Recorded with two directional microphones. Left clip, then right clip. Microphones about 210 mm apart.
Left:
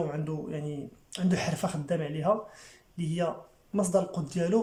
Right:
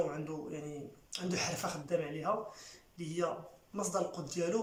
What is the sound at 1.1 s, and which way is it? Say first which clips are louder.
Speech: left 5 dB; 35° left (ahead or behind).